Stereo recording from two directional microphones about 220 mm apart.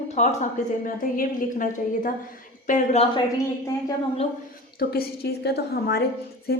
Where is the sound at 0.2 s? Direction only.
35° left (ahead or behind).